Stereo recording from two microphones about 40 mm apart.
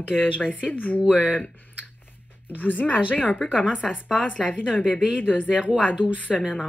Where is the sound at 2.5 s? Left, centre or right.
Left.